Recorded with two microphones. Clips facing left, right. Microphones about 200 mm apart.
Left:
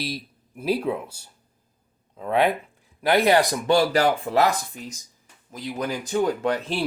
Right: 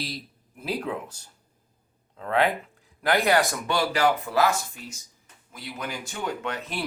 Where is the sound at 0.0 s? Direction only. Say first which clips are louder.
Left 4 dB; 15° left (ahead or behind).